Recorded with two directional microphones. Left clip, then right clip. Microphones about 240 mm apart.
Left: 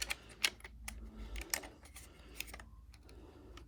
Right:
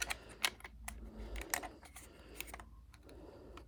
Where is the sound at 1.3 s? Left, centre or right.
Centre.